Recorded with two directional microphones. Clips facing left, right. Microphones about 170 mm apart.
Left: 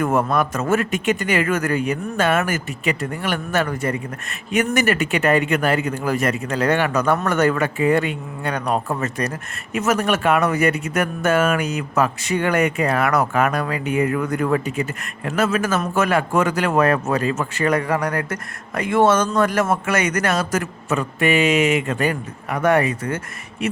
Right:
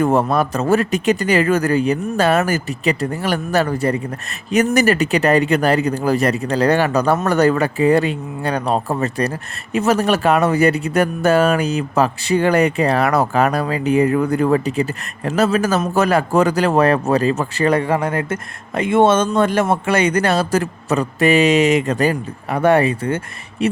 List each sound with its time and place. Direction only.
0.0 s speech: 30° right (ahead or behind)